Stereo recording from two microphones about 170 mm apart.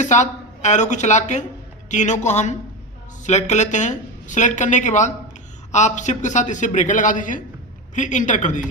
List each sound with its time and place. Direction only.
0.0 s speech: 45° left (ahead or behind)